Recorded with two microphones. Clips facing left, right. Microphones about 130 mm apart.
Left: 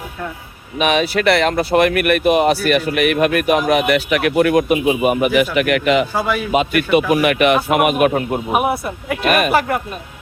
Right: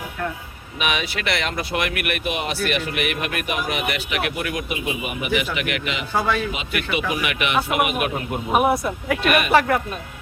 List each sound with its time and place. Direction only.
0.8 s speech: 35° left (ahead or behind)
6.1 s a man's voice: 10° left (ahead or behind)
6.5 s speech: 50° left (ahead or behind)
8.4 s speech: 5° left (ahead or behind)
9.2 s speech: 40° left (ahead or behind)
9.5 s speech: 5° left (ahead or behind)